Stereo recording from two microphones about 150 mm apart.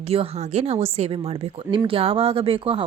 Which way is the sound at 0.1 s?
45° right (ahead or behind).